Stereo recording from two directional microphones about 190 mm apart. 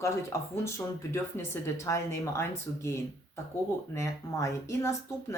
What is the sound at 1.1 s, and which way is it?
Speech, 15° left (ahead or behind).